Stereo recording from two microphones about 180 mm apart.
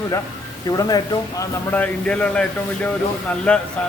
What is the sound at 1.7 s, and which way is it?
Speech, 10° left (ahead or behind).